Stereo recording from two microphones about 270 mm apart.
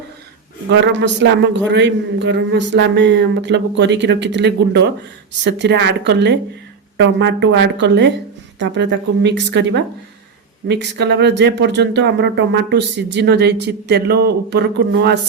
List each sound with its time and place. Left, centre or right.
0.7 s speech: right